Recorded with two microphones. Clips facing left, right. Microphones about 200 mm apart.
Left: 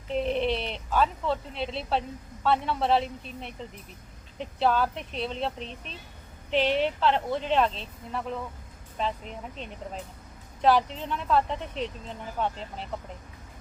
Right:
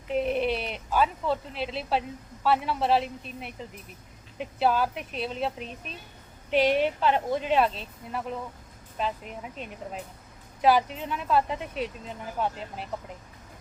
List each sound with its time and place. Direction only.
0.1 s speech: 5° right (ahead or behind)